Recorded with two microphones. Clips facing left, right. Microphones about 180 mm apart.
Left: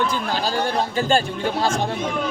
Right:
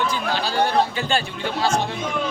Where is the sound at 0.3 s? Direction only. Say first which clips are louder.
Right 1 dB; 45° left (ahead or behind).